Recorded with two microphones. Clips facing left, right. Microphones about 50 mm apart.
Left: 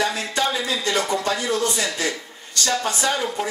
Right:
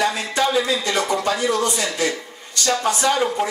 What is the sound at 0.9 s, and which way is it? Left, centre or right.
Speech, right.